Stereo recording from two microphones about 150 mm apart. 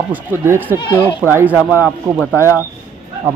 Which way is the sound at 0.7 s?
35° left (ahead or behind).